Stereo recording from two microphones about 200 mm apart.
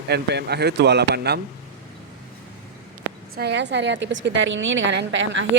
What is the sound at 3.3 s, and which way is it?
Speech, 55° right (ahead or behind).